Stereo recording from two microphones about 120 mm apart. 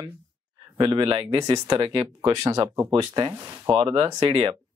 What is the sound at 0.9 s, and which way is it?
Speech, 40° right (ahead or behind).